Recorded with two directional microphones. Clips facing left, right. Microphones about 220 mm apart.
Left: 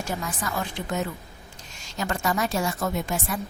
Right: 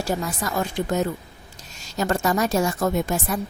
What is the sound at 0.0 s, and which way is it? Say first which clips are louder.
A woman's voice: right 5 dB; 40° right (ahead or behind).